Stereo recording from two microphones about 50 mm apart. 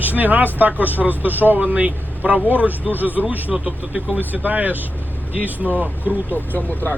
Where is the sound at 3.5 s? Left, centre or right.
Centre.